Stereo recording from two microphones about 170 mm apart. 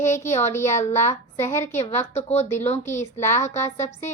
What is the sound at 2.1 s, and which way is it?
A woman's voice, 40° left (ahead or behind).